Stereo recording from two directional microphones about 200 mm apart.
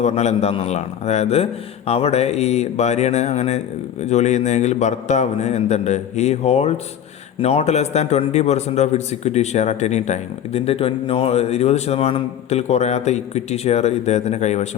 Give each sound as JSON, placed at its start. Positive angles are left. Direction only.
{"t": 0.0, "sound": "a man's voice", "side_deg": 35}